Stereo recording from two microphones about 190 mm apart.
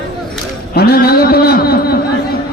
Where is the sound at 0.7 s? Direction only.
55° left (ahead or behind).